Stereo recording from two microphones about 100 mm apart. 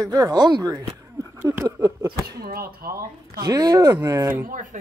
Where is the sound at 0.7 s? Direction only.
30° right (ahead or behind).